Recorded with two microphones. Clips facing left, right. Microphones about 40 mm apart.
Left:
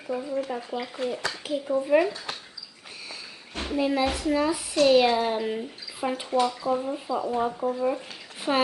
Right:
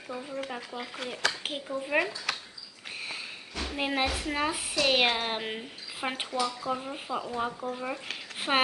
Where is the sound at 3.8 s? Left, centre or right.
Right.